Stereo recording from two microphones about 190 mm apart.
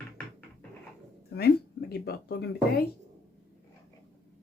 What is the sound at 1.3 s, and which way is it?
Speech, 55° left (ahead or behind).